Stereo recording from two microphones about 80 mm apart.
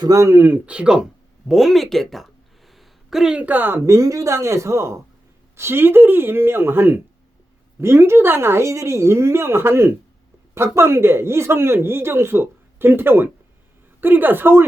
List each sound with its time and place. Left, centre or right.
0.0 s speech: right
0.3 s speech: right
1.5 s speech: centre
2.7 s a sound: centre
3.3 s speech: centre
3.8 s speech: right